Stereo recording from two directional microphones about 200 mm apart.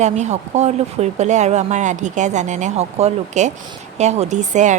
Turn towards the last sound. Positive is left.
turn(degrees=-35)  # may be behind; listen again after turning